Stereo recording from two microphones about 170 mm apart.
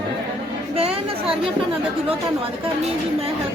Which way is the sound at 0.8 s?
35° right (ahead or behind).